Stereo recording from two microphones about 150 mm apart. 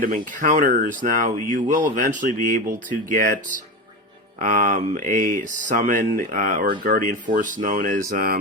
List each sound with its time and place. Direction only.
0.0 s speech: 65° right (ahead or behind)